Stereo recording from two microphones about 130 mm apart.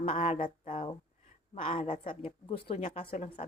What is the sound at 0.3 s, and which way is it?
Speech, 90° left.